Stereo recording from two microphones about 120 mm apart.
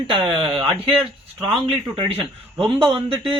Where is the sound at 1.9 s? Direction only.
50° right (ahead or behind).